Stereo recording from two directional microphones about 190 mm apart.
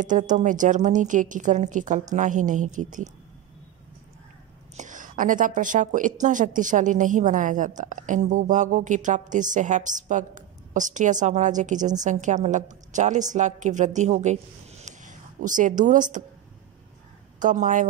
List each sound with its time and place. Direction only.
0.0 s a woman's voice: 40° right (ahead or behind)
4.7 s a woman's voice: 40° right (ahead or behind)
17.4 s a woman's voice: 40° right (ahead or behind)